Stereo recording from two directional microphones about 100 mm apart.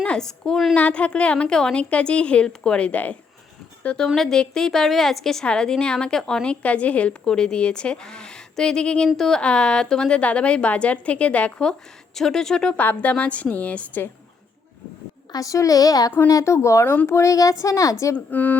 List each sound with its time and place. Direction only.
0.0 s a woman's voice: 5° left (ahead or behind)
15.3 s a woman's voice: 35° left (ahead or behind)
18.3 s a woman's voice: 15° left (ahead or behind)